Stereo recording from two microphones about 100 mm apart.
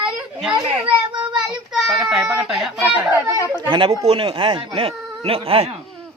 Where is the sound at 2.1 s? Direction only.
15° right (ahead or behind).